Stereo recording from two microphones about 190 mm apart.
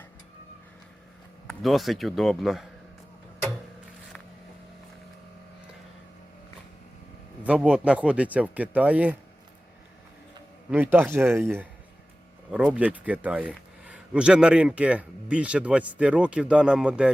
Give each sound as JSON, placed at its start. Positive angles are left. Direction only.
{"t": 1.5, "sound": "a man's voice", "side_deg": 0}
{"t": 7.4, "sound": "speech", "side_deg": -5}
{"t": 10.7, "sound": "a man's voice", "side_deg": -10}